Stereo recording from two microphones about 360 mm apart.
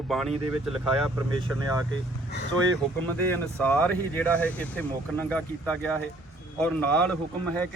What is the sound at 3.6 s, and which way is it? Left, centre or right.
Speech, centre.